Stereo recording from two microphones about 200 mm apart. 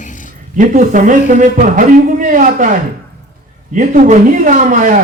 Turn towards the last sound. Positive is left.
turn(degrees=-40)  # may be behind; listen again after turning